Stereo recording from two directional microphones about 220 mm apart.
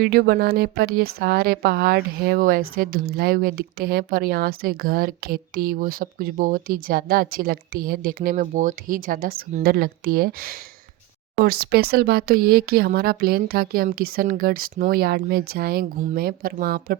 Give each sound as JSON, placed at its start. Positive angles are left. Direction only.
{"t": 0.0, "sound": "a woman's voice", "side_deg": -45}
{"t": 11.6, "sound": "speech", "side_deg": -45}